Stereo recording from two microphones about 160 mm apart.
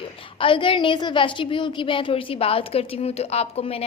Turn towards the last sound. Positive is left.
turn(degrees=40)  # may be behind; listen again after turning